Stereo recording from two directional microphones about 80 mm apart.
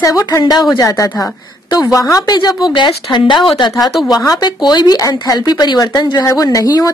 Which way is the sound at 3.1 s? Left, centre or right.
Left.